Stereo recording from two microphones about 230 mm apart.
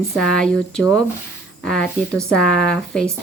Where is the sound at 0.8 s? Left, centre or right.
Centre.